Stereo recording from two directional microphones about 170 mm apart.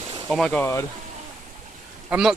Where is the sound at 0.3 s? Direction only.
Centre (ahead or behind).